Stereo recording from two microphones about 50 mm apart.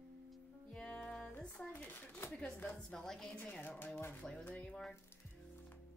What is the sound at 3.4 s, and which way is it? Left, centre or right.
Speech, left.